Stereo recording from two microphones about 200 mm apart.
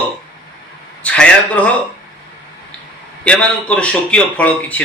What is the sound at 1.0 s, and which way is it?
Speech, 5° left (ahead or behind).